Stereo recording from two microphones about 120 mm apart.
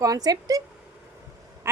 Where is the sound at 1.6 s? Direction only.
20° right (ahead or behind).